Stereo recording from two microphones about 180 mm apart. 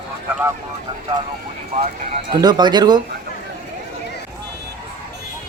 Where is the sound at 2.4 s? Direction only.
25° right (ahead or behind).